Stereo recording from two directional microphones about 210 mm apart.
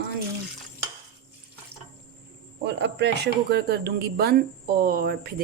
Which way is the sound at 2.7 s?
55° right (ahead or behind).